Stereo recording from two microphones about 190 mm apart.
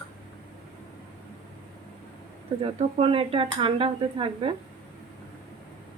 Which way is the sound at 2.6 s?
30° right (ahead or behind).